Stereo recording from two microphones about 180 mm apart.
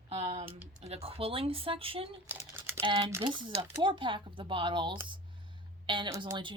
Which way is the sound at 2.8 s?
20° right (ahead or behind).